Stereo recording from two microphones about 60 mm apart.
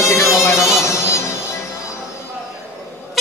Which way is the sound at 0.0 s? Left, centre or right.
Left.